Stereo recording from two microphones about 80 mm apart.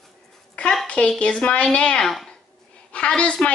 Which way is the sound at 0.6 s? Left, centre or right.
Centre.